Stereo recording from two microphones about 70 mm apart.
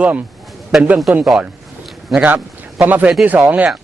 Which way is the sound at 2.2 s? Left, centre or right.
Centre.